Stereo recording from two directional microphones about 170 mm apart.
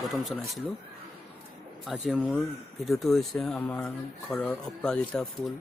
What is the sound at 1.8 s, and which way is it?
Speech, 5° right (ahead or behind).